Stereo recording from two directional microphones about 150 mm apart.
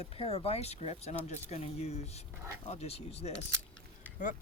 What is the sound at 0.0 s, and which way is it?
Speech, 40° left (ahead or behind).